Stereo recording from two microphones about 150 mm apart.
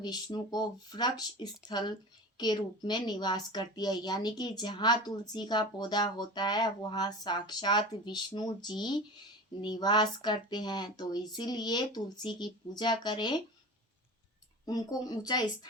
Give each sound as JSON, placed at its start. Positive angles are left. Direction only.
{"t": 0.0, "sound": "a woman's voice", "side_deg": 25}
{"t": 14.6, "sound": "a woman's voice", "side_deg": 25}